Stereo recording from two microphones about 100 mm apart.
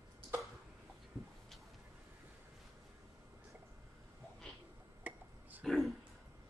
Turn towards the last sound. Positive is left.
turn(degrees=0)  # may be behind; listen again after turning